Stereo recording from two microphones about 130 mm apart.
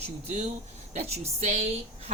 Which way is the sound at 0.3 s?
60° right (ahead or behind).